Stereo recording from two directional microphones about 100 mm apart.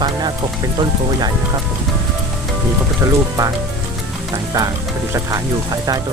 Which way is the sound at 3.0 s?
35° right (ahead or behind).